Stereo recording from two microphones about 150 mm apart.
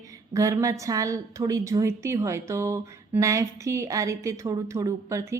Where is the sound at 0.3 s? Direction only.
20° right (ahead or behind).